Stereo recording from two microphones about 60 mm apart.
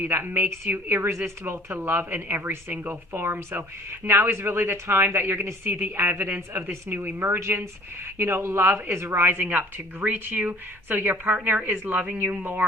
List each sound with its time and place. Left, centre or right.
0.0 s a woman's voice: right
2.9 s a woman's voice: right
7.3 s speech: right
9.2 s a woman's voice: right